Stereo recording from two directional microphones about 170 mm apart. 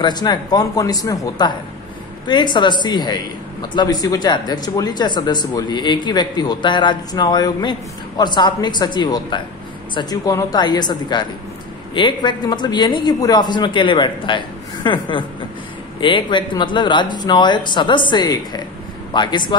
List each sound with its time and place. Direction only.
0.0 s speech: 25° left (ahead or behind)